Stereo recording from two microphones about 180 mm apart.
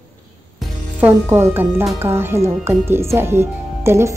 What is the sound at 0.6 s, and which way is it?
Speech, 10° right (ahead or behind).